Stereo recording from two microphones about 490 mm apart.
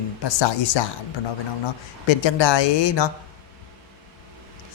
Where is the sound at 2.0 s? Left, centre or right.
Left.